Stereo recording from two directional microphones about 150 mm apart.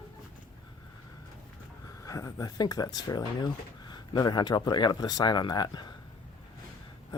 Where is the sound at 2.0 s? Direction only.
20° left (ahead or behind).